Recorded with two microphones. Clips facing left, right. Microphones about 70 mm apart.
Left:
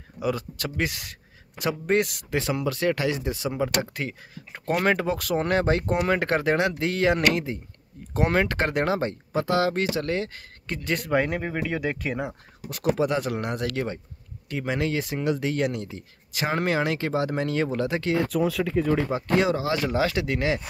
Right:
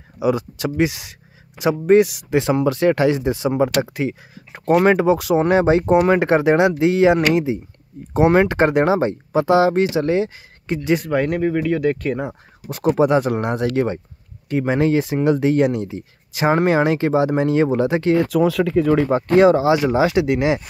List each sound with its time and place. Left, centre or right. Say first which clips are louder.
0.2 s speech: right 8 dB; centre
2.3 s speech: right 9 dB; right
3.8 s speech: right 9 dB; centre
11.1 s speech: right 6 dB; centre
12.6 s speech: right 7 dB; right
18.3 s speech: right 7 dB; right
19.1 s speech: right 10 dB; right
19.7 s speech: right 8 dB; centre